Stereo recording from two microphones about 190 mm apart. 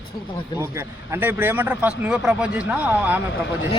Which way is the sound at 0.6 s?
15° right (ahead or behind).